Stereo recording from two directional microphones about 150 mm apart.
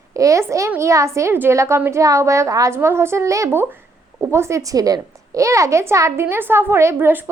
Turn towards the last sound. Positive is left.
turn(degrees=-15)  # may be behind; listen again after turning